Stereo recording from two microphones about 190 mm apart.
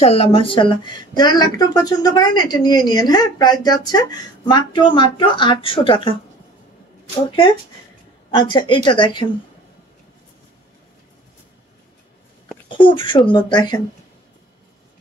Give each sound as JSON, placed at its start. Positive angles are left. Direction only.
{"t": 0.0, "sound": "speech", "side_deg": 30}
{"t": 7.2, "sound": "speech", "side_deg": 25}
{"t": 12.6, "sound": "speech", "side_deg": 25}